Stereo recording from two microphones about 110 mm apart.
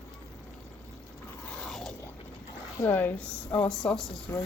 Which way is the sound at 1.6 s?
5° left (ahead or behind).